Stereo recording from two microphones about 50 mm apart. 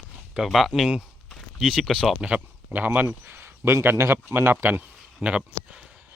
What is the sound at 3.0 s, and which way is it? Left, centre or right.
Speech, right.